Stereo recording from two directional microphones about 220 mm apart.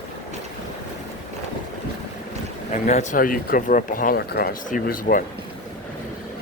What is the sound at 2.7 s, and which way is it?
Speech, 35° left (ahead or behind).